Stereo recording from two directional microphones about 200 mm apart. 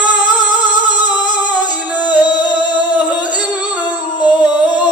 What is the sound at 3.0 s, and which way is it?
Singing, 20° left (ahead or behind).